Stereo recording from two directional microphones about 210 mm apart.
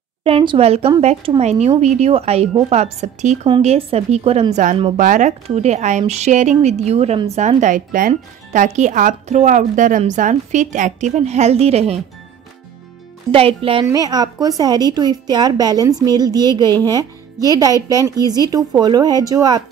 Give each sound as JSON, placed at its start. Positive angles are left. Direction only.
{"t": 0.2, "sound": "a woman's voice", "side_deg": -25}
{"t": 13.3, "sound": "a woman's voice", "side_deg": -25}